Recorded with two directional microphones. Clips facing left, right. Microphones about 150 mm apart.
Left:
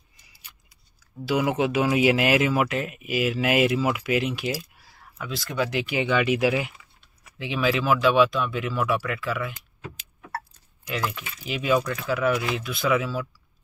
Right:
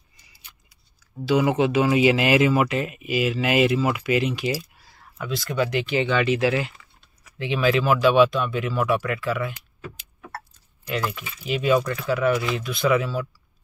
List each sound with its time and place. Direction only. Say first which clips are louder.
1.2 s speech: right 3 dB; 5° left (ahead or behind)
11.4 s speech: right 3 dB; centre (ahead or behind)